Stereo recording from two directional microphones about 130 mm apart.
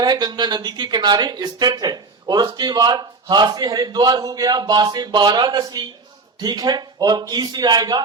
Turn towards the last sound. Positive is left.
turn(degrees=-30)  # may be behind; listen again after turning